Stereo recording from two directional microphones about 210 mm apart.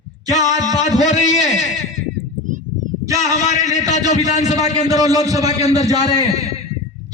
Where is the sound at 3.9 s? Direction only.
35° left (ahead or behind).